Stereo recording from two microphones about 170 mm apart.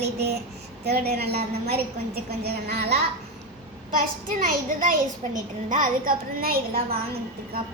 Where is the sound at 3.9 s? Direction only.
55° right (ahead or behind).